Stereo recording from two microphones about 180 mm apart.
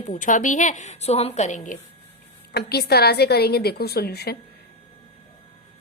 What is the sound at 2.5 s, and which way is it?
A woman's voice, 60° left (ahead or behind).